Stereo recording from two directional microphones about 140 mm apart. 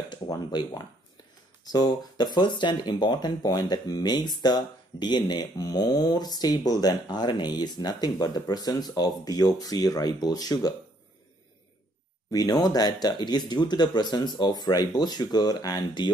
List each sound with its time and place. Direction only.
0.1 s speech: 30° left (ahead or behind)
12.3 s speech: 25° left (ahead or behind)